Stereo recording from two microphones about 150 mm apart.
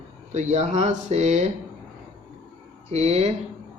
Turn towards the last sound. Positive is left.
turn(degrees=-45)  # may be behind; listen again after turning